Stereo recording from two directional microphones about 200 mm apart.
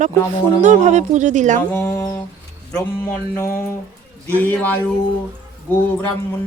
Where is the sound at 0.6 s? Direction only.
35° right (ahead or behind).